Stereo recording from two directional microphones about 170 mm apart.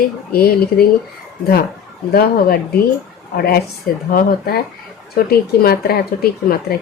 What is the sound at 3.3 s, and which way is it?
Speech, 65° left (ahead or behind).